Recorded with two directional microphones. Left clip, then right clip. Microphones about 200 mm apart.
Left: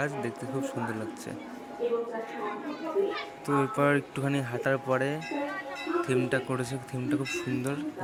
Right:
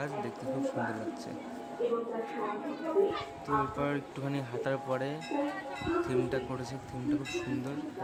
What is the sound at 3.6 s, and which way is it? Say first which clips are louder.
Speech: left 10 dB; 25° left (ahead or behind).